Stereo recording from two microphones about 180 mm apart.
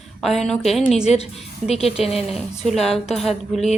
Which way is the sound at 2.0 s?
Centre (ahead or behind).